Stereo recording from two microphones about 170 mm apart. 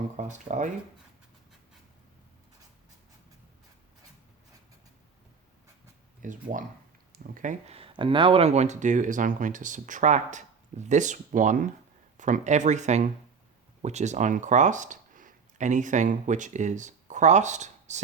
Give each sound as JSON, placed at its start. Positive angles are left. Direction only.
{"t": 0.2, "sound": "speech", "side_deg": -45}
{"t": 6.2, "sound": "speech", "side_deg": -50}
{"t": 7.7, "sound": "speech", "side_deg": -35}